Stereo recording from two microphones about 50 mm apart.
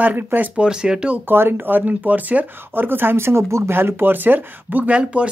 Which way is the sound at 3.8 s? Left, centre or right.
Right.